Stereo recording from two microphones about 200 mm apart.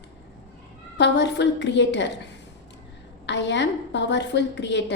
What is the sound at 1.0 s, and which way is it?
A woman's voice, 60° left (ahead or behind).